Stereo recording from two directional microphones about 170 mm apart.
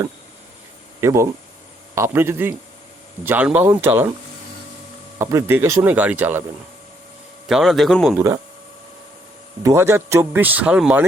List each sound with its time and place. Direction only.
1.0 s speech: 15° right (ahead or behind)
5.2 s speech: 15° right (ahead or behind)
7.4 s a man's voice: centre (ahead or behind)
8.1 s speech: 15° right (ahead or behind)
9.6 s speech: 15° right (ahead or behind)